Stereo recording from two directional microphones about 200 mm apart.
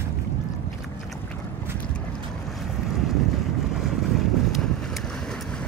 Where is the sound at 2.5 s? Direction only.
Centre (ahead or behind).